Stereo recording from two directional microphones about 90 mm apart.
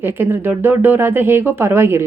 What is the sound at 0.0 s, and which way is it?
Speech, 25° right (ahead or behind).